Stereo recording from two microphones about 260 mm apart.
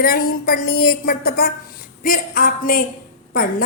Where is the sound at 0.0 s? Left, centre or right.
Left.